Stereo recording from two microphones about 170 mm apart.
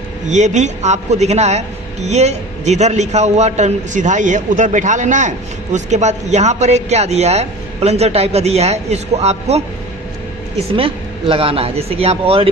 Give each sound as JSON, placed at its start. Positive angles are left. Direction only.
{"t": 0.3, "sound": "a man's voice", "side_deg": -45}
{"t": 10.8, "sound": "a man's voice", "side_deg": -35}